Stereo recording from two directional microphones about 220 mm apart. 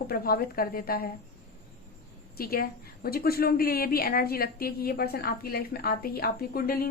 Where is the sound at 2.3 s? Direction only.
45° left (ahead or behind).